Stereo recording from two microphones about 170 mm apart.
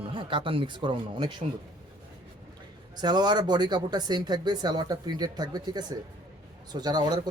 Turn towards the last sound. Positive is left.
turn(degrees=-25)  # may be behind; listen again after turning